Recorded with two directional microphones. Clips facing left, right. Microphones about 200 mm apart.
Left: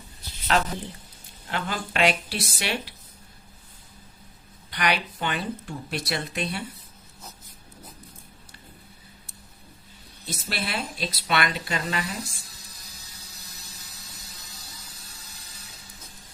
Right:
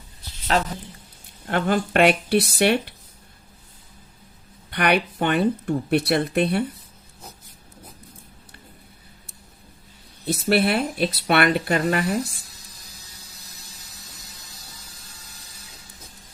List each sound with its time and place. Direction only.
0.5 s speech: 35° right (ahead or behind)
1.5 s speech: 55° right (ahead or behind)
4.7 s speech: 55° right (ahead or behind)
10.2 s speech: 60° right (ahead or behind)